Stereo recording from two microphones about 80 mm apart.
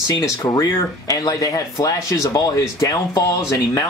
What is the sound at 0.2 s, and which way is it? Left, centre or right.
Speech, left.